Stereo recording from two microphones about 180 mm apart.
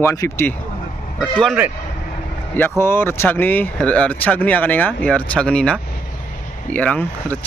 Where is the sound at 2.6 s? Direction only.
15° left (ahead or behind).